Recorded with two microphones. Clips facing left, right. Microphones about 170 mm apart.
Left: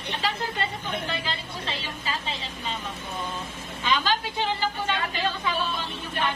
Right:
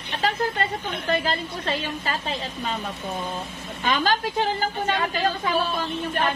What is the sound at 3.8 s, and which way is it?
A woman's voice, 45° right (ahead or behind).